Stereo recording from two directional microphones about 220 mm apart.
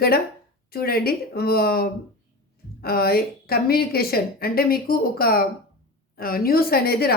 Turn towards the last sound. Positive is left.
turn(degrees=45)  # may be behind; listen again after turning